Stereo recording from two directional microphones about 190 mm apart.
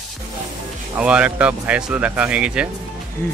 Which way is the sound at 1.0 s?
5° right (ahead or behind).